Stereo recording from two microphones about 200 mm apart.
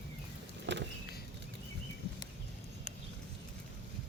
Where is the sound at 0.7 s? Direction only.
60° right (ahead or behind).